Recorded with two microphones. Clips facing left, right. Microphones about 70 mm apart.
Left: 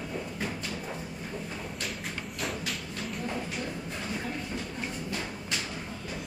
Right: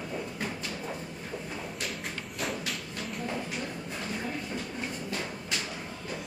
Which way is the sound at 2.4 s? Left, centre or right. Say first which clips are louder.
Right 1 dB; centre.